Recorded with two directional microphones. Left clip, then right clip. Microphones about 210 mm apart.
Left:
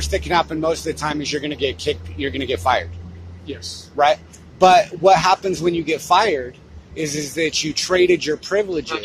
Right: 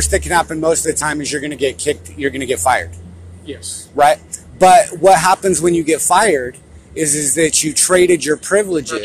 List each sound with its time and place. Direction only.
0.0 s speech: 20° right (ahead or behind)
3.9 s speech: 20° right (ahead or behind)